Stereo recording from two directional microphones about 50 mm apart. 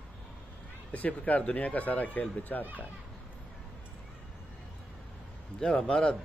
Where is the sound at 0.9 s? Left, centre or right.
Left.